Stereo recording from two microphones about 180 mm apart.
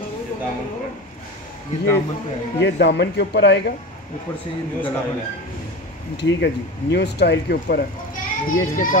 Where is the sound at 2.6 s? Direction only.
70° left (ahead or behind).